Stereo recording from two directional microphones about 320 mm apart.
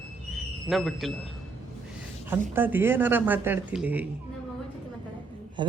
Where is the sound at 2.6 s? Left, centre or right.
Centre.